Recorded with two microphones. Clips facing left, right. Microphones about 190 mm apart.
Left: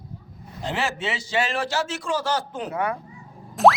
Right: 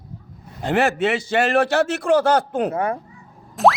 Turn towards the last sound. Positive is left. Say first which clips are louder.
# even
turn(degrees=0)  # may be behind; listen again after turning